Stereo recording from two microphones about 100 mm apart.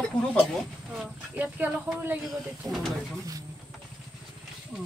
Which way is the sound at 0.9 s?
15° right (ahead or behind).